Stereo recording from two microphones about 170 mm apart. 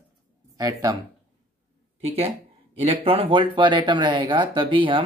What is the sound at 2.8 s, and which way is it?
Speech, 35° right (ahead or behind).